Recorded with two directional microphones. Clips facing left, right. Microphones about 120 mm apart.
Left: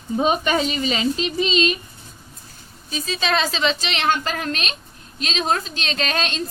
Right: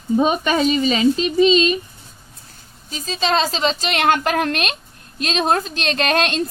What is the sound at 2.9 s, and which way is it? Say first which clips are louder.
A woman's voice: right 2 dB; 35° right (ahead or behind).